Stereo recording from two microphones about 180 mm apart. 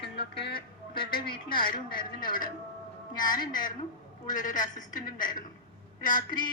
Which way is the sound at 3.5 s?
50° left (ahead or behind).